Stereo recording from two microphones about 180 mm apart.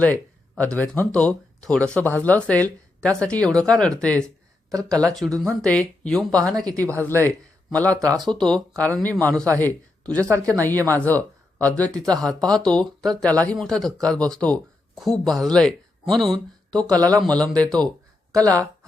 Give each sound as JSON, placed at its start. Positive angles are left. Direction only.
{"t": 0.0, "sound": "a sound", "side_deg": 10}
{"t": 0.8, "sound": "speech", "side_deg": 10}
{"t": 5.4, "sound": "a man's voice", "side_deg": 5}
{"t": 6.7, "sound": "speech", "side_deg": -20}
{"t": 6.9, "sound": "a man's voice", "side_deg": 10}
{"t": 8.0, "sound": "speech", "side_deg": -20}
{"t": 8.3, "sound": "a man's voice", "side_deg": 5}
{"t": 10.2, "sound": "speech", "side_deg": -15}
{"t": 10.6, "sound": "a man's voice", "side_deg": 10}
{"t": 18.3, "sound": "speech", "side_deg": -20}